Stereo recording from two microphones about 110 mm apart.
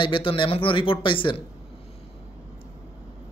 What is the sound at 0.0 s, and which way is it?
Speech, 50° left (ahead or behind).